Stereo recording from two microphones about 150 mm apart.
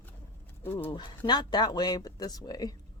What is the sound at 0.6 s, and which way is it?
Speech, 15° left (ahead or behind).